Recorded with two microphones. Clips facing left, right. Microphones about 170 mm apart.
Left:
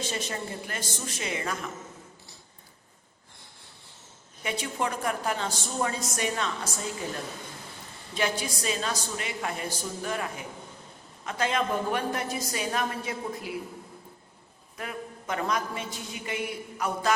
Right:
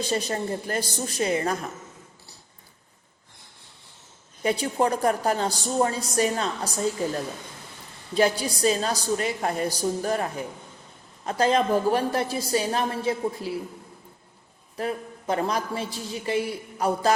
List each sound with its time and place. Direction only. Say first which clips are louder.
0.0 s a woman's voice: right 6 dB; 35° right (ahead or behind)
4.4 s a woman's voice: right 7 dB; 35° right (ahead or behind)
14.8 s a woman's voice: right 7 dB; 35° right (ahead or behind)